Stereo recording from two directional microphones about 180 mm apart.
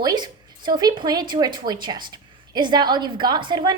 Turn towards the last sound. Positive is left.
turn(degrees=-25)  # may be behind; listen again after turning